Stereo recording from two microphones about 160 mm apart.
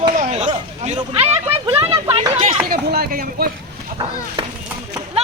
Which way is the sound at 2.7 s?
70° right (ahead or behind).